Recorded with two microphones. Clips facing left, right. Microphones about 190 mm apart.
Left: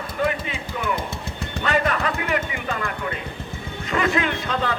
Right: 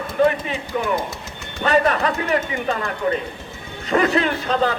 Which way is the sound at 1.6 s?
35° right (ahead or behind).